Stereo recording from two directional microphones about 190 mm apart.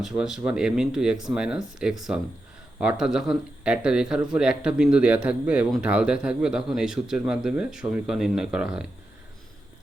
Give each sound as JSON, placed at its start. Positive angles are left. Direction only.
{"t": 0.0, "sound": "speech", "side_deg": 0}